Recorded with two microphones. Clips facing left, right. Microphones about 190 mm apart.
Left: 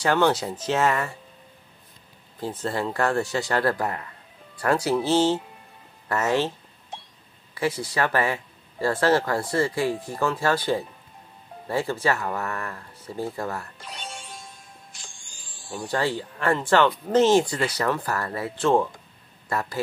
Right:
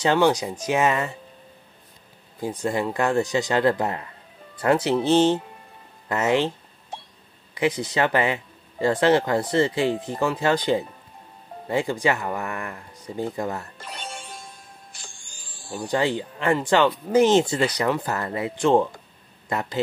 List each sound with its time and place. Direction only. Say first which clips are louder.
0.0 s speech: right 2 dB; 15° right (ahead or behind)
2.4 s speech: right 3 dB; 15° right (ahead or behind)
7.5 s speech: right 3 dB; 20° right (ahead or behind)
13.7 s music: right 2 dB; centre (ahead or behind)
15.9 s speech: right 3 dB; 20° right (ahead or behind)